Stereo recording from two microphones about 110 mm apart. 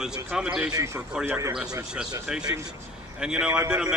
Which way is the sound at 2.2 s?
5° right (ahead or behind).